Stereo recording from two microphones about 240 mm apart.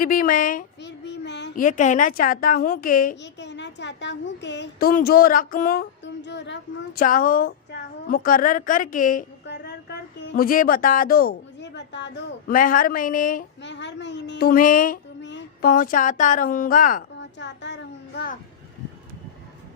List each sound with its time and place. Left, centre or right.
0.0 s a woman's voice: left
0.9 s a woman's voice: left
6.2 s a child's voice: left
7.0 s a woman's voice: left
15.2 s a woman's voice: left
17.4 s a child's voice: left